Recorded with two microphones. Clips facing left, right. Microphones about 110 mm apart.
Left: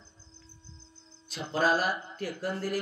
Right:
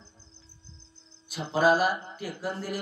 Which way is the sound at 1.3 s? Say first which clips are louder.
Right 4 dB; 5° right (ahead or behind).